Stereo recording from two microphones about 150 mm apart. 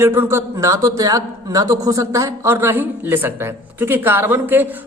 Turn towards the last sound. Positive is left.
turn(degrees=-10)  # may be behind; listen again after turning